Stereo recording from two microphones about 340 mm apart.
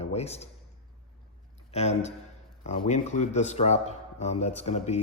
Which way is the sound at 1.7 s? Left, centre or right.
Centre.